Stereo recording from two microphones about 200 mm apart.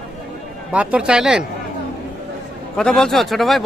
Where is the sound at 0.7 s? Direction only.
5° right (ahead or behind).